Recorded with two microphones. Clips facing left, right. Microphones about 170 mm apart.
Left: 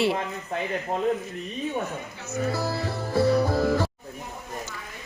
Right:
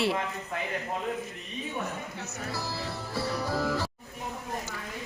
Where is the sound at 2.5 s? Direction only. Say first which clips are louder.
Left 7 dB; 50° left (ahead or behind).